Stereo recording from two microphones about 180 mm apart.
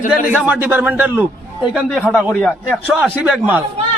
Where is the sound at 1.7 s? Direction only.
Centre (ahead or behind).